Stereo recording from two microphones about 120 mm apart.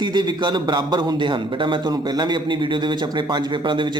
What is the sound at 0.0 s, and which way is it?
A man's voice, 40° right (ahead or behind).